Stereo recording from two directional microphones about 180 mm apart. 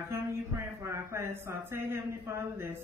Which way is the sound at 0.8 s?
15° right (ahead or behind).